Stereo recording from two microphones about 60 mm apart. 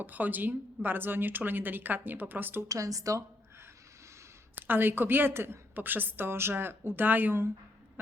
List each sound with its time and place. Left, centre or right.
0.0 s a woman's voice: right
2.6 s a woman's voice: right
4.5 s a woman's voice: right